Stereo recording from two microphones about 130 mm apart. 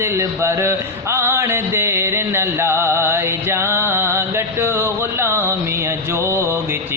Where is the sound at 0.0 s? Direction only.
20° right (ahead or behind).